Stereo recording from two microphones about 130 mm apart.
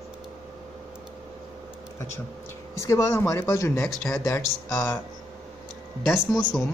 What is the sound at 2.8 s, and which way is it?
Speech, 20° left (ahead or behind).